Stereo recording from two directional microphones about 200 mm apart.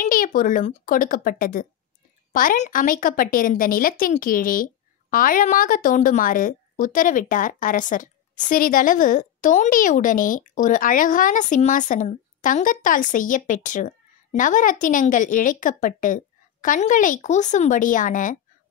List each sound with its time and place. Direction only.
0.0 s a woman's voice: 40° left (ahead or behind)